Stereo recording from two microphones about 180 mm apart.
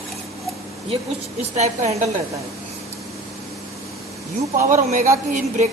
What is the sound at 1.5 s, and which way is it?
Speech, 40° right (ahead or behind).